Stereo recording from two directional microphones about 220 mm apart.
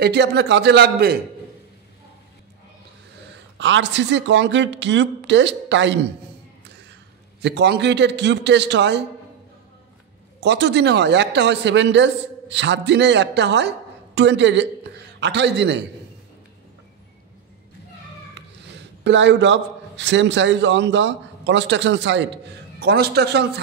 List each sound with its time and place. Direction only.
0.0 s speech: 50° right (ahead or behind)
3.5 s speech: 55° right (ahead or behind)
7.4 s speech: 50° right (ahead or behind)
10.4 s a man's voice: 50° right (ahead or behind)
18.7 s a man's voice: 55° right (ahead or behind)